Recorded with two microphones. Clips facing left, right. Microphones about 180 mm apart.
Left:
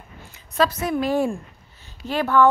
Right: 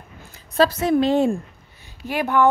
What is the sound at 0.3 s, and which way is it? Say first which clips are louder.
A woman's voice: right 3 dB; 30° right (ahead or behind).